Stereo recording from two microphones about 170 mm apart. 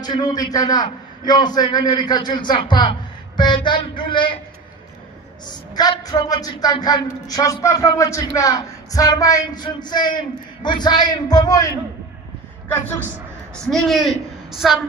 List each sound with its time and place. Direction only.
0.0 s speech: 25° left (ahead or behind)
5.8 s speech: 25° left (ahead or behind)
12.6 s a man's voice: 10° left (ahead or behind)